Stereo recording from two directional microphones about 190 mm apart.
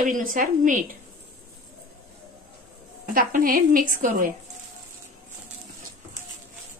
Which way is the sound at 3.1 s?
45° right (ahead or behind).